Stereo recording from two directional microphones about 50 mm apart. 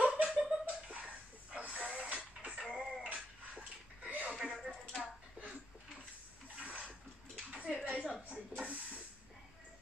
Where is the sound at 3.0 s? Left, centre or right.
Right.